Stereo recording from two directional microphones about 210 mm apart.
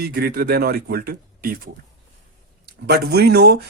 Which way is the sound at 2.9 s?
50° right (ahead or behind).